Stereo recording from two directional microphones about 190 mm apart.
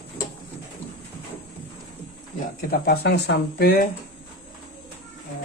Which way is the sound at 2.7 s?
55° left (ahead or behind).